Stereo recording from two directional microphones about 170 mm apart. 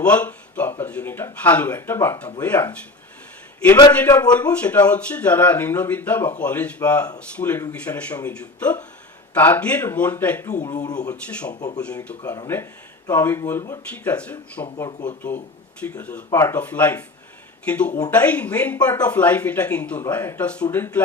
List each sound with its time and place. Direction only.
0.0 s speech: 10° left (ahead or behind)
3.9 s speech: 10° left (ahead or behind)
12.2 s speech: 20° left (ahead or behind)